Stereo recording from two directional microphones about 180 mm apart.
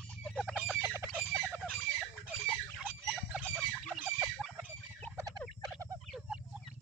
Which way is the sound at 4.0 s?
10° right (ahead or behind).